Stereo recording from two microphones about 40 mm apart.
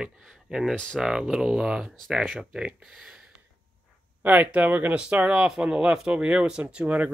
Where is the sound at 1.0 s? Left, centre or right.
Centre.